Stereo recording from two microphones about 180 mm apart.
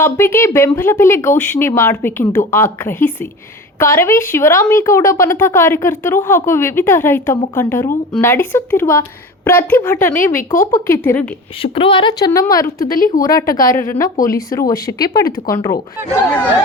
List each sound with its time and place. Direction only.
0.0 s speech: 15° left (ahead or behind)
11.6 s a woman's voice: 30° left (ahead or behind)